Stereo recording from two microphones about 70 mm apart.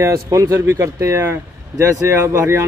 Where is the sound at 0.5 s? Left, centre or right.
Right.